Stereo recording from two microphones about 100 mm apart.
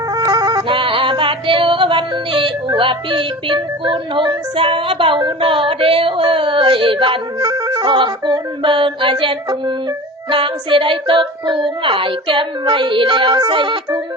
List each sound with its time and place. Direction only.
0.1 s music: 40° right (ahead or behind)
0.7 s music: 65° right (ahead or behind)
7.3 s music: 35° right (ahead or behind); by 9.7 s 55° right (ahead or behind)
10.2 s a sound: 60° right (ahead or behind)